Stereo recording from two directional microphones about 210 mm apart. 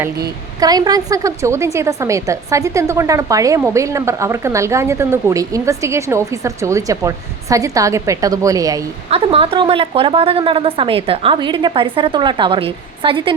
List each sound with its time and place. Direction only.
0.6 s speech: 20° right (ahead or behind)
9.0 s a woman's voice: 25° right (ahead or behind)